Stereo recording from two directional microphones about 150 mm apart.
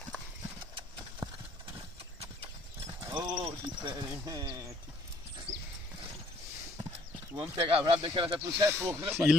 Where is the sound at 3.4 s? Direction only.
30° right (ahead or behind).